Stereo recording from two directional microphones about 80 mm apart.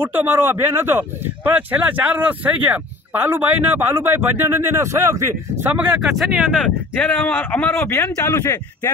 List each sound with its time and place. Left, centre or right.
0.0 s speech: right
5.9 s speech: centre
7.0 s a man's voice: centre; by 8.9 s left